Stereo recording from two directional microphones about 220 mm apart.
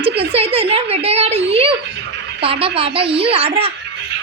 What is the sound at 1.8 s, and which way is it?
Dog, 55° right (ahead or behind).